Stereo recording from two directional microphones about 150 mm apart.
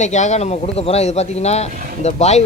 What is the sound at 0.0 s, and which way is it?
Speech, 50° left (ahead or behind).